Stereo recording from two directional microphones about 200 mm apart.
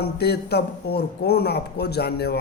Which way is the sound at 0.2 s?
55° left (ahead or behind).